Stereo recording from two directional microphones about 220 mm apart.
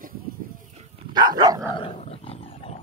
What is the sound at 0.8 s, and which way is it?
Dog, 20° right (ahead or behind).